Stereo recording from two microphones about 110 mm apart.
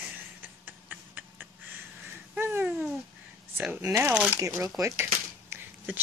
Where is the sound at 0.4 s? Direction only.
15° right (ahead or behind).